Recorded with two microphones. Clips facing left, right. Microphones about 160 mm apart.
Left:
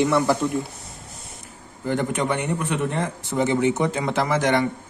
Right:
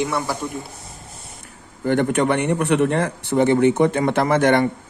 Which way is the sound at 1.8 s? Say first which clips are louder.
Right 5 dB; 65° right (ahead or behind).